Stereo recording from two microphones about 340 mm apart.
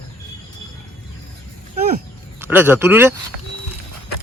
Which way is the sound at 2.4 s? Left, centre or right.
Centre.